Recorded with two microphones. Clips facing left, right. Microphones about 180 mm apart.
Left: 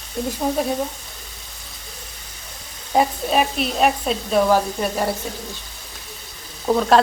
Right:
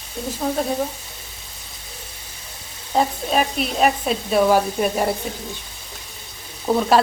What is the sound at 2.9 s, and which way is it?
Frying, centre (ahead or behind).